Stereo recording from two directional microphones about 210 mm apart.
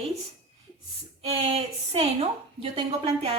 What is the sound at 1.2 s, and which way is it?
A woman's voice, 30° right (ahead or behind).